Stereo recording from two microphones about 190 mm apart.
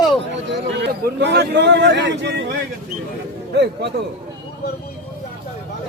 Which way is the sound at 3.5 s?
65° right (ahead or behind).